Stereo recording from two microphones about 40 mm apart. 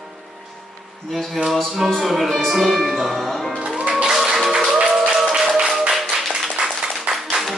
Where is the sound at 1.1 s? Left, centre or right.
Centre.